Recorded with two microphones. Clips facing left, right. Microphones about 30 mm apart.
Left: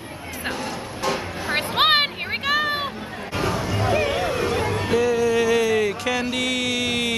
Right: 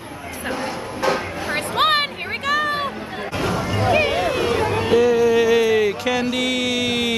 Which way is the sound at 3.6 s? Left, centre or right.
Centre.